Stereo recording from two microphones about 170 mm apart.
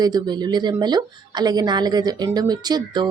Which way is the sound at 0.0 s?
25° right (ahead or behind).